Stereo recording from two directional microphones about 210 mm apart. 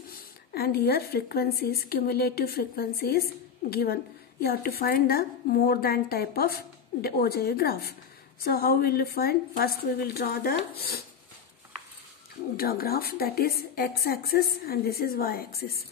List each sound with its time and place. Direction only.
0.1 s a woman's voice: 45° left (ahead or behind)
12.5 s a woman's voice: 45° left (ahead or behind)